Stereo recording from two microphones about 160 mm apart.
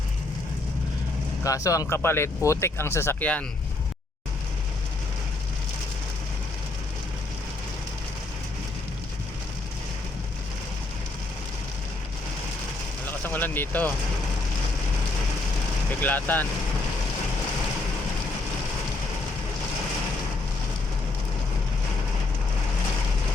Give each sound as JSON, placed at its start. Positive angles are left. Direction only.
{"t": 1.5, "sound": "speech", "side_deg": 20}
{"t": 13.1, "sound": "speech", "side_deg": 10}
{"t": 16.0, "sound": "speech", "side_deg": 10}